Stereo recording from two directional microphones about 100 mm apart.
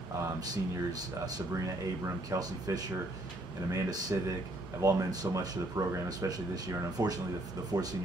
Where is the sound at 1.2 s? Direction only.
40° right (ahead or behind).